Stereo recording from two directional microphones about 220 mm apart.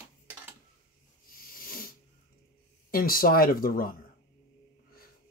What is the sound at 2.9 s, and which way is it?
Speech, 40° left (ahead or behind).